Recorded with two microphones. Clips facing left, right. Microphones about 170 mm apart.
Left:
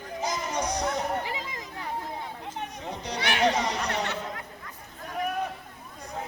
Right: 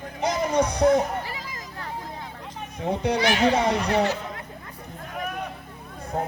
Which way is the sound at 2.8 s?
60° right (ahead or behind).